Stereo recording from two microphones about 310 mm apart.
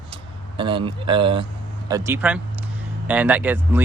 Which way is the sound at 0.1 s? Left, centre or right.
Centre.